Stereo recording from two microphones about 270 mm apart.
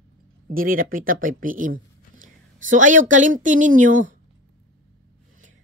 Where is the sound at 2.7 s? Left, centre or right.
Right.